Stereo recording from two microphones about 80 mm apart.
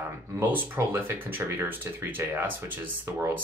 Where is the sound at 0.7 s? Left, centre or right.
Right.